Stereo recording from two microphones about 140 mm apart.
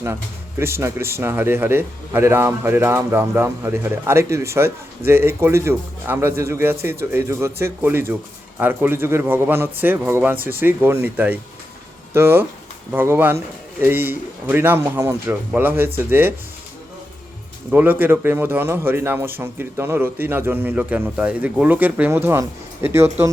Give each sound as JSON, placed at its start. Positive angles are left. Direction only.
{"t": 0.6, "sound": "a man's voice", "side_deg": -20}
{"t": 17.7, "sound": "a man's voice", "side_deg": -10}